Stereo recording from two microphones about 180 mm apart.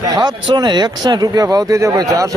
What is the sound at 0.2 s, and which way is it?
Speech, 25° right (ahead or behind).